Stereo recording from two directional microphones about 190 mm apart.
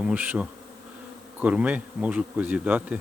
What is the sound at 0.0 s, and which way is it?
Bee, 10° right (ahead or behind).